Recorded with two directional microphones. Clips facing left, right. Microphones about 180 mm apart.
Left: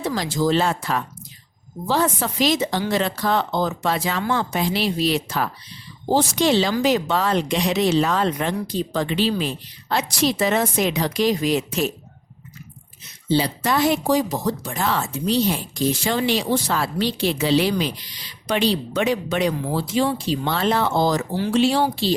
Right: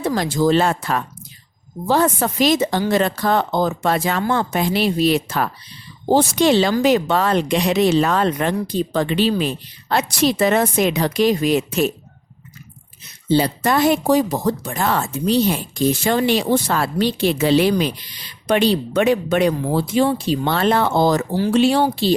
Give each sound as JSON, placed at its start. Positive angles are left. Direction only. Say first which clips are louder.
{"t": 0.0, "sound": "speech", "louder": "right 4 dB", "side_deg": -55}
{"t": 13.2, "sound": "speech", "louder": "right 3 dB", "side_deg": -50}